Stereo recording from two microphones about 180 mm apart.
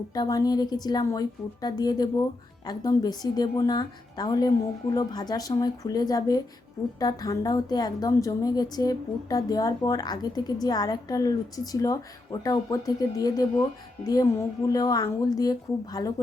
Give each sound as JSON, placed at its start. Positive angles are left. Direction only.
{"t": 0.1, "sound": "a woman's voice", "side_deg": 20}